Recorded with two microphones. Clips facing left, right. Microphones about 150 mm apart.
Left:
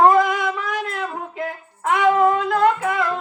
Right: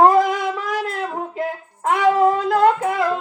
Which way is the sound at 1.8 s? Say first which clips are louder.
Right 1 dB; 35° right (ahead or behind).